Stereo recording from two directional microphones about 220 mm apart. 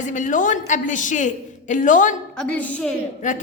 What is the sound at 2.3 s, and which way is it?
Speech, 5° left (ahead or behind).